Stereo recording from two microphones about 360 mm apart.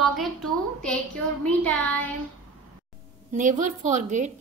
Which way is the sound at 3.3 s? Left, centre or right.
Right.